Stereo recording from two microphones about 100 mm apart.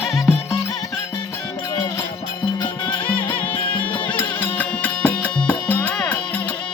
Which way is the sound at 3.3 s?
15° left (ahead or behind).